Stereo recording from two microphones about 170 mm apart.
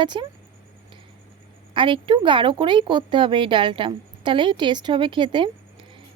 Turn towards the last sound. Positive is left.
turn(degrees=-30)  # may be behind; listen again after turning